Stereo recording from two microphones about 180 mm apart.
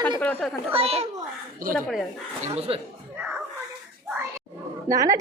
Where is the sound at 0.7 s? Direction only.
35° right (ahead or behind).